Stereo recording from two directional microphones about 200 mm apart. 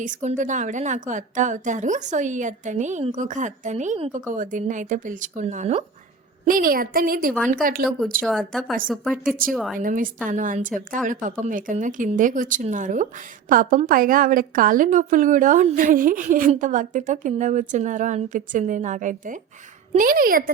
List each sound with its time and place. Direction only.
0.0 s a woman's voice: 40° right (ahead or behind)
8.2 s speech: centre (ahead or behind)
9.7 s a woman's voice: 45° right (ahead or behind)